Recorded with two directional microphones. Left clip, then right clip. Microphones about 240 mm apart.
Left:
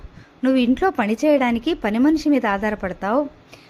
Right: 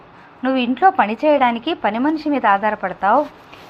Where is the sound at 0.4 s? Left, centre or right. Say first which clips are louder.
Right 4 dB; left.